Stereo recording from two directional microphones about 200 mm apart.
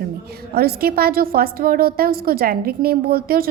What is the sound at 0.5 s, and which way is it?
A woman's voice, 50° right (ahead or behind).